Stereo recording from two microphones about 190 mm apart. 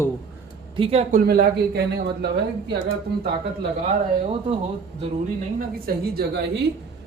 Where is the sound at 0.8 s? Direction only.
30° right (ahead or behind).